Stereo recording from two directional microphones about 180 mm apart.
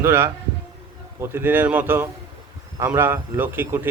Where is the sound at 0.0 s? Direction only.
15° right (ahead or behind).